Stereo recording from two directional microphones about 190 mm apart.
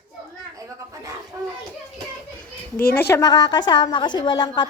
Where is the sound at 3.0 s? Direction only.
15° left (ahead or behind).